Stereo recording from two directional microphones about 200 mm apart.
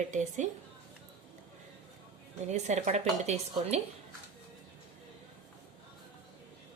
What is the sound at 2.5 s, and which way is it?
Speech, 35° right (ahead or behind).